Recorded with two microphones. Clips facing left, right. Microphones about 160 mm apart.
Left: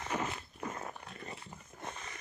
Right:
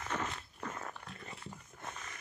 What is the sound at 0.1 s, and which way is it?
Walk, 10° left (ahead or behind).